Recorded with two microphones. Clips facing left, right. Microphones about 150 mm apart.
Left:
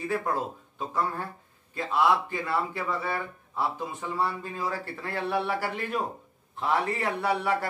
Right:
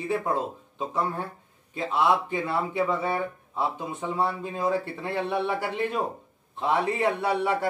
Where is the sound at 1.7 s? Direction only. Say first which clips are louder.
Right 1 dB; 20° right (ahead or behind).